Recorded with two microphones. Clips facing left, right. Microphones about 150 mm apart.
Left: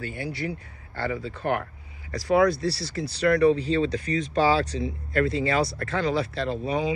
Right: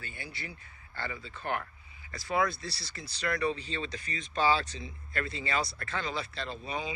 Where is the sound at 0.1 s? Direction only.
85° left.